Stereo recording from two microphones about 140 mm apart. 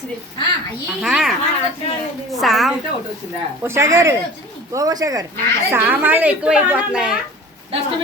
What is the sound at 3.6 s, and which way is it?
Speech, 20° right (ahead or behind).